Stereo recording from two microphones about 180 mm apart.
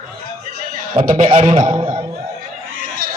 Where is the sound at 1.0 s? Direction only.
45° right (ahead or behind).